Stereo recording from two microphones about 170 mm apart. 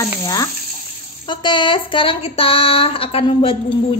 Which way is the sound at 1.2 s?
25° left (ahead or behind).